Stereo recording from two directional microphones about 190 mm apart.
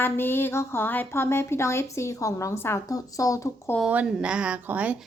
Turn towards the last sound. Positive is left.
turn(degrees=-5)  # may be behind; listen again after turning